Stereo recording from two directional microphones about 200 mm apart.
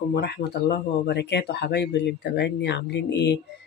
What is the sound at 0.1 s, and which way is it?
Speech, 55° left (ahead or behind).